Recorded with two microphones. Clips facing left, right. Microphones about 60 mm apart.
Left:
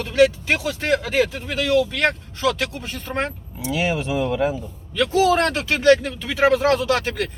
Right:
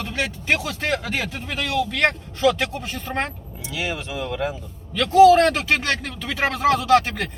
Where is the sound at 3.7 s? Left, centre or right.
Left.